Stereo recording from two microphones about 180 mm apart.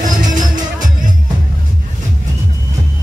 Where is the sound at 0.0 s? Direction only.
45° right (ahead or behind).